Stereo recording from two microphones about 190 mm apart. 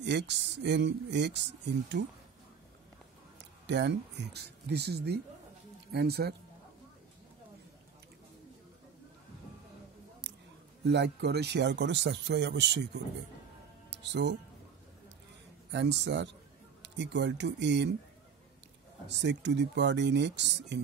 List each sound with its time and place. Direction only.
0.0 s speech: 65° right (ahead or behind)
3.6 s speech: 65° right (ahead or behind)
10.2 s a sound: 65° right (ahead or behind)
10.9 s speech: 60° right (ahead or behind)
13.8 s music: 65° right (ahead or behind)
15.7 s speech: 65° right (ahead or behind)
19.0 s speech: 65° right (ahead or behind)